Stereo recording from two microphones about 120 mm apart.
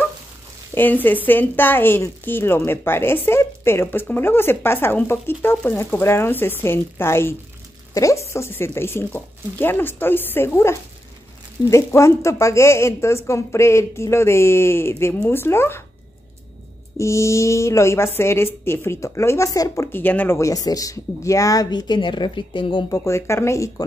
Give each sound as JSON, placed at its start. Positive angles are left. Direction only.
{"t": 1.0, "sound": "a woman's voice", "side_deg": 15}
{"t": 16.9, "sound": "a woman's voice", "side_deg": 25}
{"t": 20.3, "sound": "speech", "side_deg": 25}
{"t": 22.8, "sound": "a woman's voice", "side_deg": 25}